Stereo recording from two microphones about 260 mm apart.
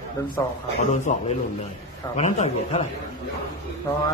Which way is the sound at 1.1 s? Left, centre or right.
Left.